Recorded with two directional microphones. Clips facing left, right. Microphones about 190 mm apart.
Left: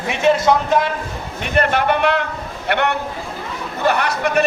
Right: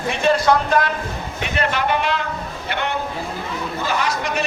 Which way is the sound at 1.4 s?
55° left (ahead or behind).